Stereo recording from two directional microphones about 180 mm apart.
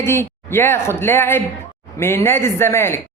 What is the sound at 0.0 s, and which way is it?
A man's voice, 15° left (ahead or behind).